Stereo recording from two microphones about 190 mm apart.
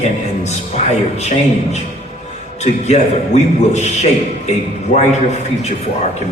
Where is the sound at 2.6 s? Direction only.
35° left (ahead or behind).